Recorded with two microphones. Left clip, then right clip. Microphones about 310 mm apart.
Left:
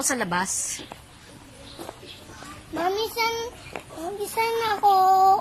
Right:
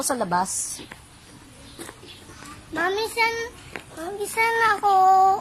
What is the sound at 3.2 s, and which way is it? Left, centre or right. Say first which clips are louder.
A woman's voice: right 3 dB; centre.